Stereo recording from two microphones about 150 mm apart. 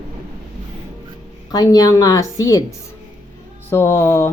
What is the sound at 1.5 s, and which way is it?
A woman's voice, 25° left (ahead or behind).